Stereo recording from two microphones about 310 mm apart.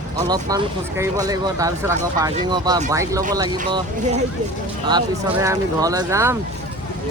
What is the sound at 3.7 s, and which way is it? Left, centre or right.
Speech, right.